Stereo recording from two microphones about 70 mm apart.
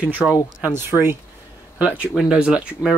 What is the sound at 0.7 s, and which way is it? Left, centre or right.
Speech, right.